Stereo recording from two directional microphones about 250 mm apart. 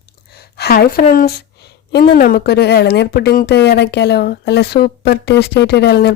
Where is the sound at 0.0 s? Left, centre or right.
Left.